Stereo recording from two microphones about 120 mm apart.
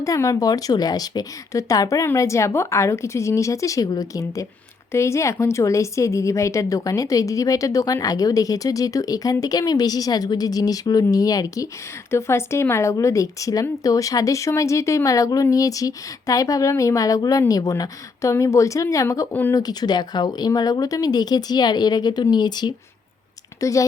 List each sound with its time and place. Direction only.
0.0 s speech: 30° left (ahead or behind)
19.3 s speech: 15° left (ahead or behind)
19.5 s speech: 35° left (ahead or behind)